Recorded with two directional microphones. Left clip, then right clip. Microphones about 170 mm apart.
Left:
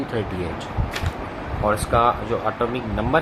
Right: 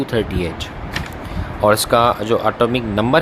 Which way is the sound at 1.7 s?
90° right.